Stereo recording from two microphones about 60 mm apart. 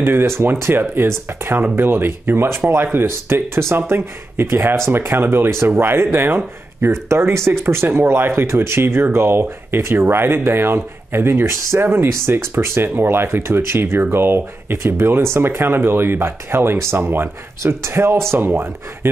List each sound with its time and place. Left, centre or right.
0.0 s speech: right